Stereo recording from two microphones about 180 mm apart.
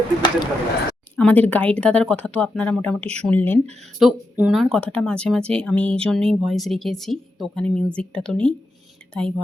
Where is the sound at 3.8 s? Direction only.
5° right (ahead or behind).